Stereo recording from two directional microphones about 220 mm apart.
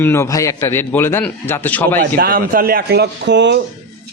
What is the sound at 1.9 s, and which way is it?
A man's voice, 40° right (ahead or behind).